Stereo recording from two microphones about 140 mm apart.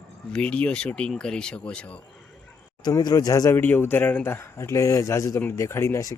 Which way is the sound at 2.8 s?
30° left (ahead or behind).